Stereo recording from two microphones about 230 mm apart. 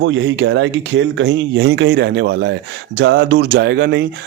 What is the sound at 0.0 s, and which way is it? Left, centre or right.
Speech, right.